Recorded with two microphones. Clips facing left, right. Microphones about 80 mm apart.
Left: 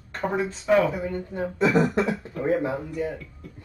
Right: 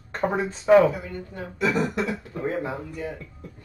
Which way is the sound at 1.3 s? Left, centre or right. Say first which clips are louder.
Left 3 dB; left.